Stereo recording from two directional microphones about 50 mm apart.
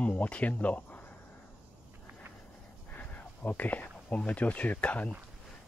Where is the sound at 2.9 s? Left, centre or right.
Left.